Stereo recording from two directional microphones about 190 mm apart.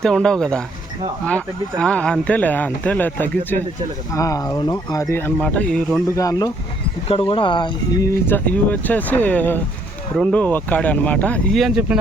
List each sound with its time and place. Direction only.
0.0 s speech: 5° left (ahead or behind)
6.1 s speech: 15° left (ahead or behind)
7.1 s speech: 30° left (ahead or behind); by 11.9 s 5° right (ahead or behind)